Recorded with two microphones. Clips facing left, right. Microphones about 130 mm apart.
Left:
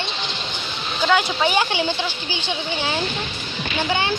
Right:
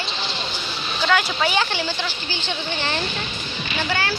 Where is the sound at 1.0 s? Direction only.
15° left (ahead or behind).